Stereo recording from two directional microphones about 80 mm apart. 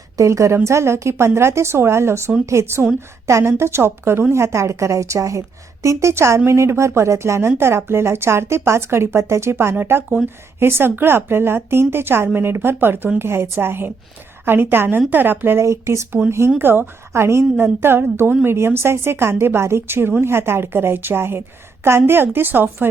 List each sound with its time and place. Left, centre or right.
0.2 s a woman's voice: right
16.6 s a woman's voice: right